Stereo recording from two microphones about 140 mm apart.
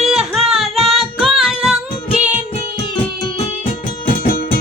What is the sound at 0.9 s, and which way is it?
Female singing, centre (ahead or behind).